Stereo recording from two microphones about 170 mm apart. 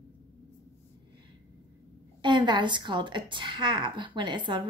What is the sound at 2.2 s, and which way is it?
A woman's voice, 25° right (ahead or behind).